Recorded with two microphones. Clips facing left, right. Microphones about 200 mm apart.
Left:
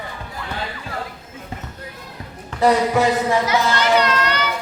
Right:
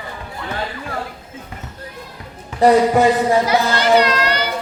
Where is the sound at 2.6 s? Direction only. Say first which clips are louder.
Right 4 dB; 35° right (ahead or behind).